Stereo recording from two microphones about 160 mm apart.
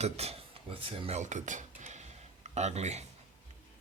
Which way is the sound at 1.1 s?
50° right (ahead or behind).